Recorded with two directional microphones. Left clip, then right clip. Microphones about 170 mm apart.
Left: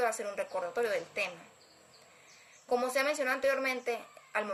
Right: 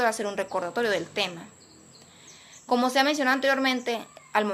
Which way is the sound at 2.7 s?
20° left (ahead or behind).